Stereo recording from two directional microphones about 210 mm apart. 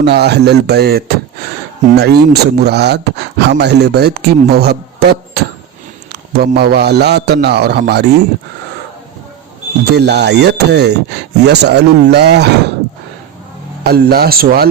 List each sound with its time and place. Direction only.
0.0 s a man's voice: 50° right (ahead or behind)
9.9 s speech: 50° right (ahead or behind)
13.8 s speech: 50° right (ahead or behind)